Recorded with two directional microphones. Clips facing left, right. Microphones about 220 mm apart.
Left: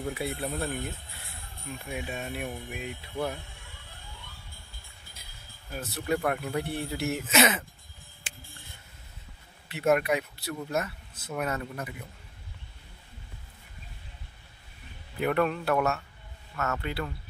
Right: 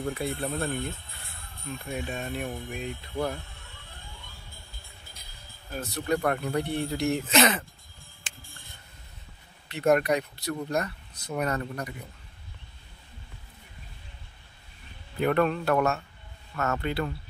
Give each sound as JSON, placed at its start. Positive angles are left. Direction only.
{"t": 0.0, "sound": "speech", "side_deg": 5}
{"t": 5.7, "sound": "speech", "side_deg": 5}
{"t": 9.7, "sound": "speech", "side_deg": 5}
{"t": 15.1, "sound": "speech", "side_deg": 5}
{"t": 16.5, "sound": "speech", "side_deg": -35}